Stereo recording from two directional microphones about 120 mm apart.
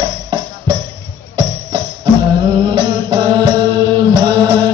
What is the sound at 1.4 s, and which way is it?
Music, 40° right (ahead or behind).